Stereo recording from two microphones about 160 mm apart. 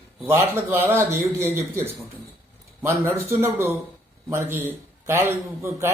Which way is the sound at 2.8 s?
15° right (ahead or behind).